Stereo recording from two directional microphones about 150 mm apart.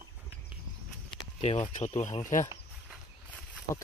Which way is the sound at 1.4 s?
35° left (ahead or behind).